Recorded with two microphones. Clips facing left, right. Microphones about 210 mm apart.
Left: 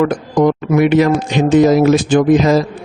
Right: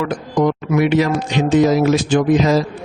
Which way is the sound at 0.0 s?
50° left (ahead or behind).